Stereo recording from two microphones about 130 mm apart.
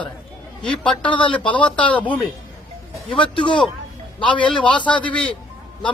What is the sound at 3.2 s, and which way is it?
Speech, 40° left (ahead or behind).